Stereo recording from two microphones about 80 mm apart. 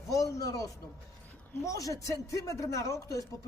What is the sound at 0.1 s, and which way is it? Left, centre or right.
A man's voice, left.